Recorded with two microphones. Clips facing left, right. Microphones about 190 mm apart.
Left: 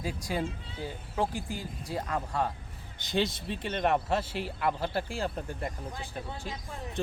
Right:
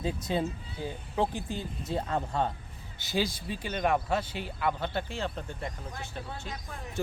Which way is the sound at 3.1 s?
5° right (ahead or behind).